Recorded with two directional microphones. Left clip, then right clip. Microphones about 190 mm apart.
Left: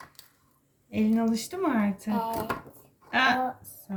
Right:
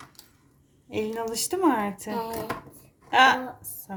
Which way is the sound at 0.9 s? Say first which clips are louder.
Left 1 dB; 55° right (ahead or behind).